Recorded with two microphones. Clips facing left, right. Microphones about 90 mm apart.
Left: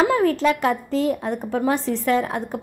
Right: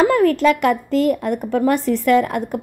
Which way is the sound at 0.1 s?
65° right (ahead or behind).